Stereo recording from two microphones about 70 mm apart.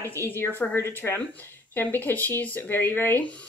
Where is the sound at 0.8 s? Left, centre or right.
Left.